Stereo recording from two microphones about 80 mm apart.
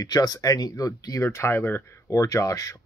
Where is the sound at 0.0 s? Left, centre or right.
Left.